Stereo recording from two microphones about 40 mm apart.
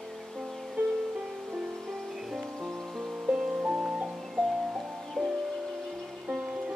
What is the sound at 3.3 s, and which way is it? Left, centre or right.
Music, right.